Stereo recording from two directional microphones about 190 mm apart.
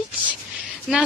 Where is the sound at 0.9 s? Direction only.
Centre (ahead or behind).